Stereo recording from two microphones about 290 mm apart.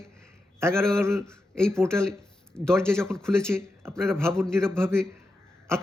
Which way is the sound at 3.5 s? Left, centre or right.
Centre.